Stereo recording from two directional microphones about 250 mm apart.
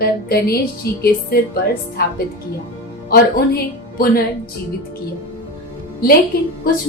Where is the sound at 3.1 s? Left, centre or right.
Left.